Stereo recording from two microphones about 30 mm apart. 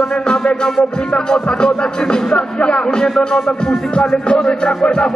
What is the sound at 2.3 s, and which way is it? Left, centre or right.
Speech, left.